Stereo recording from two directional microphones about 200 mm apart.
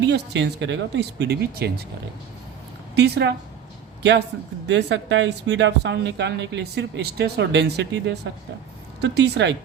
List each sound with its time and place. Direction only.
0.0 s speech: 60° right (ahead or behind)
2.9 s a woman's voice: 60° right (ahead or behind)
4.7 s speech: 60° right (ahead or behind)